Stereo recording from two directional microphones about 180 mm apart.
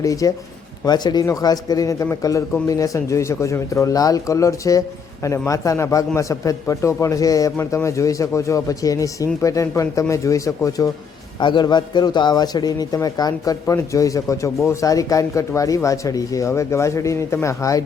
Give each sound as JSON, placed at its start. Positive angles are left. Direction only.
{"t": 0.0, "sound": "a man's voice", "side_deg": 20}